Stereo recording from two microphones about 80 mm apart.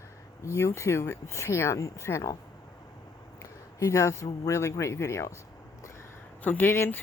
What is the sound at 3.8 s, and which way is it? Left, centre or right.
Speech, left.